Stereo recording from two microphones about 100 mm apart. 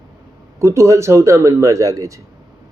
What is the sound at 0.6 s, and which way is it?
A man's voice, 30° right (ahead or behind).